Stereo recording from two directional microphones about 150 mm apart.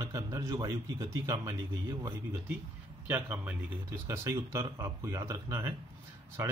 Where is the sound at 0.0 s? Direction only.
25° right (ahead or behind).